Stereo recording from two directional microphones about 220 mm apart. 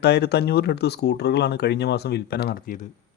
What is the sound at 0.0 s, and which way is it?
Speech, 50° left (ahead or behind).